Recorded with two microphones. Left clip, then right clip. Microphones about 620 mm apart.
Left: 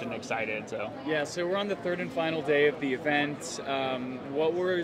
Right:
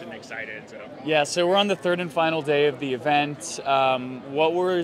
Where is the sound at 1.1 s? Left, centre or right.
Right.